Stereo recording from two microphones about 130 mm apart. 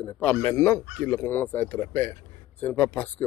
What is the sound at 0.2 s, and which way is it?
A man's voice, 15° left (ahead or behind).